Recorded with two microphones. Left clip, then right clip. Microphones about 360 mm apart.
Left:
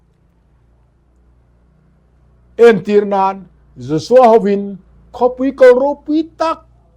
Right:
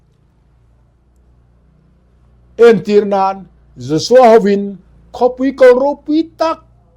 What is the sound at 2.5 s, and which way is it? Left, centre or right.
Speech, left.